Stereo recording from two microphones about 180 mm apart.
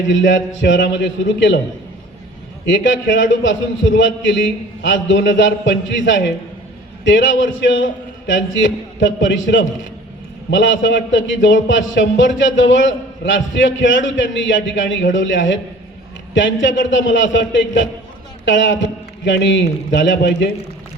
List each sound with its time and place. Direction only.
0.1 s a man's voice: 90° left
2.6 s a man's voice: 90° left